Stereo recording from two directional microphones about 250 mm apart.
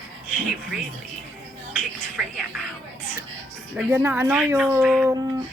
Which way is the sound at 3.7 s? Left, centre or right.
Centre.